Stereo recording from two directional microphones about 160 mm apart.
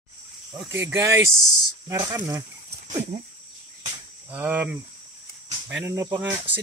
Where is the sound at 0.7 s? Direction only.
15° right (ahead or behind).